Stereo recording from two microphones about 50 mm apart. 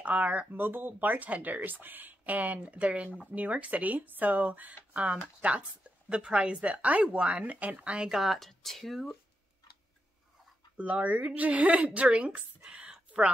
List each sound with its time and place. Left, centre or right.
0.0 s a woman's voice: right
0.6 s a woman's voice: right
8.1 s speech: centre
10.8 s a woman's voice: right
12.6 s a sound: centre